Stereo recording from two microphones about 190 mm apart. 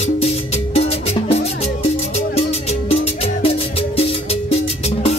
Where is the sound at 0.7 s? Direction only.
35° left (ahead or behind).